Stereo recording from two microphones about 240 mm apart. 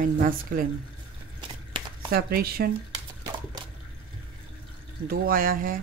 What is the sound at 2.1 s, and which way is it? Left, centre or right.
Speech, right.